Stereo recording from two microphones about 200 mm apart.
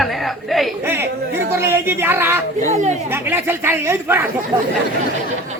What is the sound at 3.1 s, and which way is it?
Speech, 10° right (ahead or behind).